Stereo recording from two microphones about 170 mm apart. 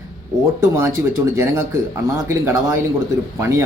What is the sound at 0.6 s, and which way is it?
Speech, 15° right (ahead or behind).